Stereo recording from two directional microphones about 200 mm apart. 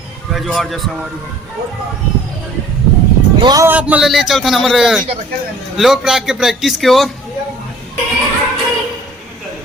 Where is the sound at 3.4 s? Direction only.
20° right (ahead or behind).